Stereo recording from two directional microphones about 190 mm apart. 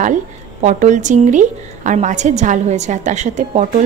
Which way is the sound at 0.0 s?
40° right (ahead or behind).